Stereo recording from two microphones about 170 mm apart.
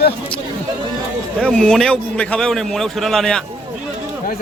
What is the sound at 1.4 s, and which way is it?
A man's voice, 5° left (ahead or behind).